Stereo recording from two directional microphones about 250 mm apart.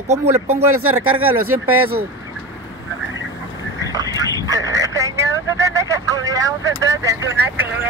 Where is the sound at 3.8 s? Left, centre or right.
Centre.